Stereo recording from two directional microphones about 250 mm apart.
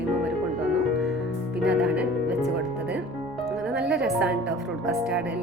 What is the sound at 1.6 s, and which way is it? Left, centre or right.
Music, centre.